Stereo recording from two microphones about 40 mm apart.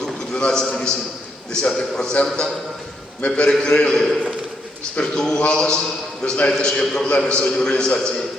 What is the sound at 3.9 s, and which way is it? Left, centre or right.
A man's voice, centre.